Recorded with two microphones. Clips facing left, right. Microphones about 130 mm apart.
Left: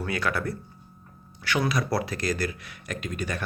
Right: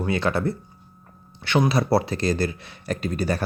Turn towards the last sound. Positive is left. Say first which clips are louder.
# right 7 dB
turn(degrees=-35)  # may be behind; listen again after turning